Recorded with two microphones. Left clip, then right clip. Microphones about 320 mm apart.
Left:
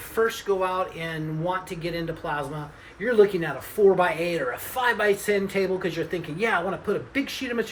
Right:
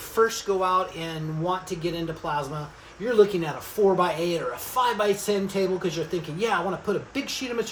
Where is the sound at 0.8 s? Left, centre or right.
Centre.